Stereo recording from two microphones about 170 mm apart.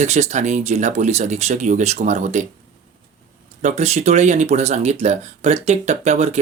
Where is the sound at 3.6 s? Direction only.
40° right (ahead or behind).